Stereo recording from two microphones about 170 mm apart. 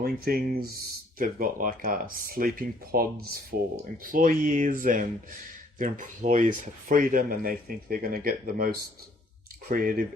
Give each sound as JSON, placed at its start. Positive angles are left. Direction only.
{"t": 0.0, "sound": "speech", "side_deg": -60}
{"t": 3.9, "sound": "speech", "side_deg": -55}